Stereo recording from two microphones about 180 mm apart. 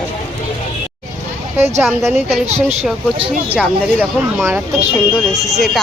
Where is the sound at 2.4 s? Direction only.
35° right (ahead or behind).